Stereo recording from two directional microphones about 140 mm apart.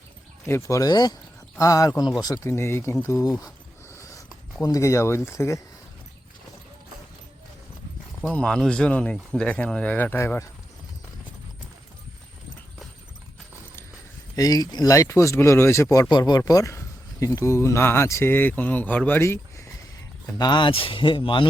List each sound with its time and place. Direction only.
0.4 s speech: 20° left (ahead or behind)
8.2 s speech: 5° left (ahead or behind)
14.3 s speech: 25° left (ahead or behind)
20.2 s speech: 30° left (ahead or behind)